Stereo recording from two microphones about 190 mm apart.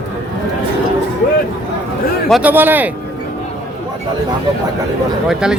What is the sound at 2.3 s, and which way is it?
Speech, 5° right (ahead or behind).